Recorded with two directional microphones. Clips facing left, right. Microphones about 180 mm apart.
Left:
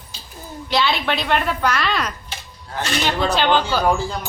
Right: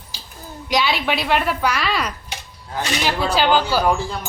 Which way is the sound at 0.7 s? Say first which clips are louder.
Even; 10° right (ahead or behind).